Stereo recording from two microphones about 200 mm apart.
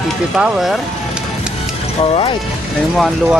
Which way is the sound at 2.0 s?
30° left (ahead or behind).